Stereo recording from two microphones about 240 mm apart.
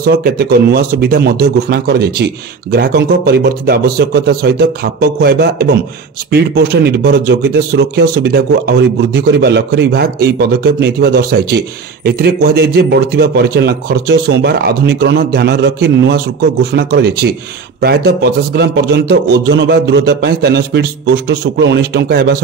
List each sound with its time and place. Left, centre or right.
0.0 s a man's voice: right